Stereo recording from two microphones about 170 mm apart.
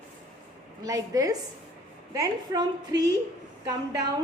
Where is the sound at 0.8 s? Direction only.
20° right (ahead or behind).